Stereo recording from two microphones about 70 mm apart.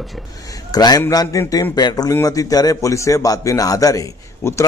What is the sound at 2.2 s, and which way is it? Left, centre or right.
A man's voice, left.